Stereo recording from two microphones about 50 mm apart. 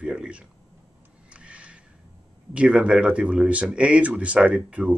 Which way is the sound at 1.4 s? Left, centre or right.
Right.